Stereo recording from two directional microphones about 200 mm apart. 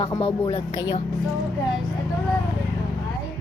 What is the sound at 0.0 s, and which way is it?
Speech, 20° left (ahead or behind).